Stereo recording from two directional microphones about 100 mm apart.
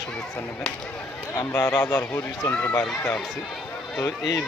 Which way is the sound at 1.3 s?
25° left (ahead or behind).